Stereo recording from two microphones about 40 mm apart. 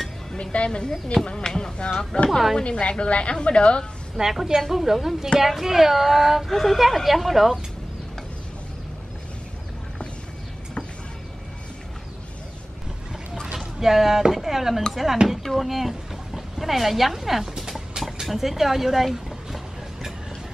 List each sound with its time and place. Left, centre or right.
0.4 s a woman's voice: left
1.8 s a woman's voice: left
4.2 s speech: centre
13.5 s boat: centre
14.3 s speech: centre
15.2 s a sound: centre
18.2 s speech: centre